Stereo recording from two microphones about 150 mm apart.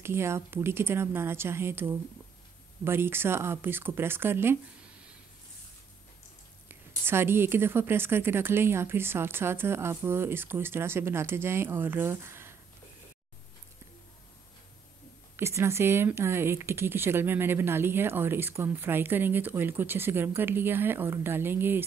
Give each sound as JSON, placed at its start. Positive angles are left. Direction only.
{"t": 0.0, "sound": "speech", "side_deg": -15}
{"t": 6.7, "sound": "speech", "side_deg": -15}
{"t": 15.3, "sound": "speech", "side_deg": -20}